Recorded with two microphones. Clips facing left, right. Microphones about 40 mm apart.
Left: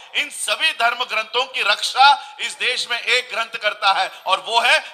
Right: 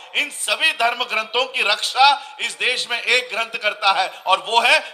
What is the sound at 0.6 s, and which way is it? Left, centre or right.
A man's voice, left.